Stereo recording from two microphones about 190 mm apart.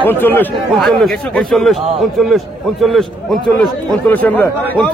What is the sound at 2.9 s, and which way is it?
Speech, centre (ahead or behind).